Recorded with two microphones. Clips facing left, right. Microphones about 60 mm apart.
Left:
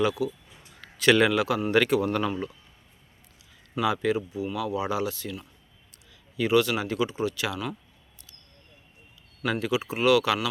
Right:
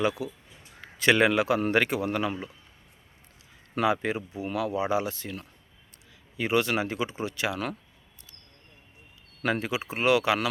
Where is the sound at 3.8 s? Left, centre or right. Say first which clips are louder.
Left 1 dB; right.